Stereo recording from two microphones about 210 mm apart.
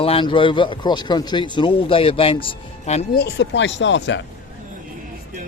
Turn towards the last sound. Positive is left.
turn(degrees=60)  # may be behind; listen again after turning